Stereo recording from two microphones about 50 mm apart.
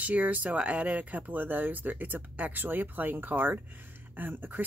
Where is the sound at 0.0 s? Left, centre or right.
Right.